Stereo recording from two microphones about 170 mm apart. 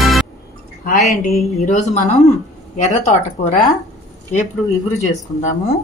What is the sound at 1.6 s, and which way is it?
Speech, 45° left (ahead or behind).